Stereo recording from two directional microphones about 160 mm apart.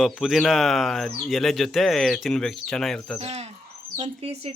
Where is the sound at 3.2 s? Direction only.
40° right (ahead or behind).